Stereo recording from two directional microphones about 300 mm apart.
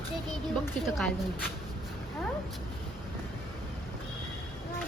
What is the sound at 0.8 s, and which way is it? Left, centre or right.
Speech, centre.